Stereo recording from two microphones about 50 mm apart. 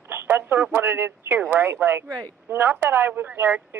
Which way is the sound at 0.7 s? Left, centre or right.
Right.